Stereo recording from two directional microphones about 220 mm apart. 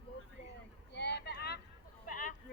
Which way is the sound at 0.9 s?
50° left (ahead or behind).